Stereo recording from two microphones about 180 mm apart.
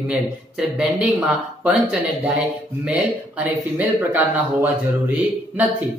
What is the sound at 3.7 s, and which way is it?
A man's voice, 10° right (ahead or behind).